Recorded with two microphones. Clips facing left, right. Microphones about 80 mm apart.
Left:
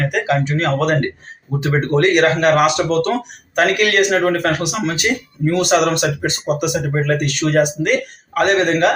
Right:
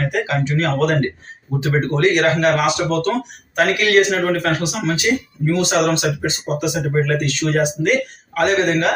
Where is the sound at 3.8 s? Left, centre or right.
Left.